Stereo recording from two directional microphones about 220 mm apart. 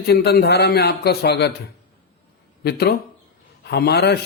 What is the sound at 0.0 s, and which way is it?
A man's voice, 45° left (ahead or behind).